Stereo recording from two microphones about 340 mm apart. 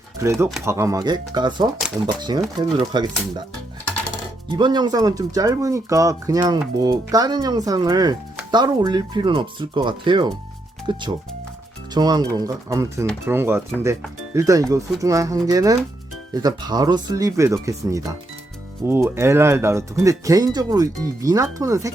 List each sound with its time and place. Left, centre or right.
0.2 s speech: centre
4.5 s speech: centre